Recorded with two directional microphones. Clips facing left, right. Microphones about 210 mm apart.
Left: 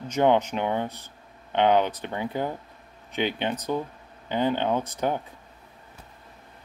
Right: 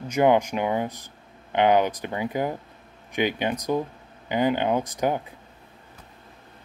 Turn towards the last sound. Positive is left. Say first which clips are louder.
# right 2 dB
turn(degrees=-10)  # may be behind; listen again after turning